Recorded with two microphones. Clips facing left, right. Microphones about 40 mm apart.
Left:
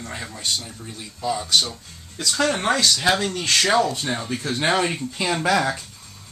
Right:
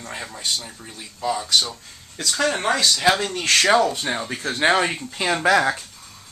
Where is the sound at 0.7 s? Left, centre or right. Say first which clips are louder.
Left 1 dB; centre.